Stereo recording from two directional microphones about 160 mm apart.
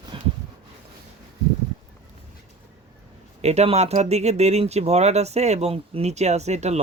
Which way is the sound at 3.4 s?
45° right (ahead or behind).